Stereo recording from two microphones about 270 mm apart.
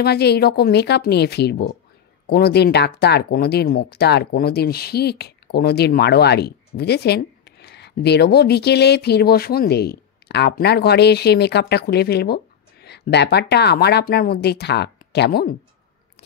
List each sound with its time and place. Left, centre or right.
0.0 s speech: left